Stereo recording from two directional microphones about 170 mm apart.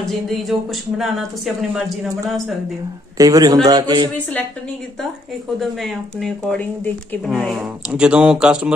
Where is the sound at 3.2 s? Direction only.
20° right (ahead or behind).